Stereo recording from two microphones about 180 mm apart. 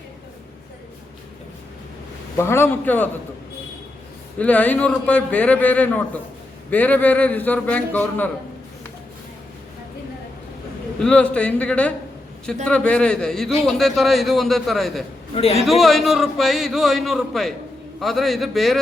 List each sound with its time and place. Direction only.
2.4 s a man's voice: 15° left (ahead or behind)
4.4 s a man's voice: 10° left (ahead or behind)
11.0 s a man's voice: 5° left (ahead or behind)
15.4 s a man's voice: 35° left (ahead or behind)
15.6 s speech: centre (ahead or behind)